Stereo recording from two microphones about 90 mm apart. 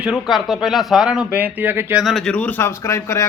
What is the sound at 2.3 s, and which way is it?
Speech, 15° left (ahead or behind).